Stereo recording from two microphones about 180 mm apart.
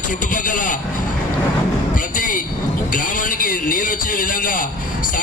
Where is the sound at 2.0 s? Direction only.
50° left (ahead or behind).